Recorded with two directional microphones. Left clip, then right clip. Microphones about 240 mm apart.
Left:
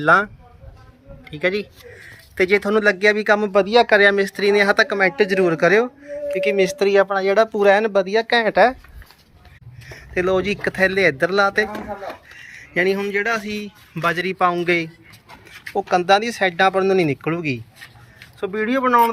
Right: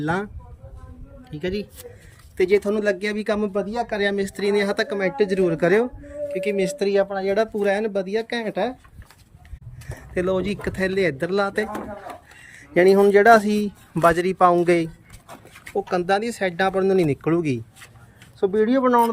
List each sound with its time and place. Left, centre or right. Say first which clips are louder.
2.3 s speech: left 3 dB; centre
3.5 s speech: left 11 dB; left
4.0 s speech: left 7 dB; centre
10.2 s a man's voice: left 4 dB; centre
15.9 s speech: left 6 dB; centre